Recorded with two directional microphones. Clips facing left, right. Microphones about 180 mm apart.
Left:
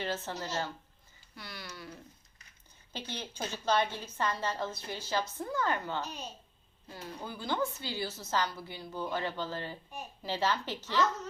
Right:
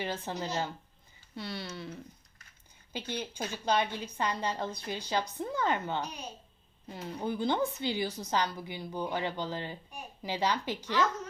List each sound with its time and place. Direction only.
0.0 s a woman's voice: 15° right (ahead or behind)
2.9 s a woman's voice: 10° right (ahead or behind)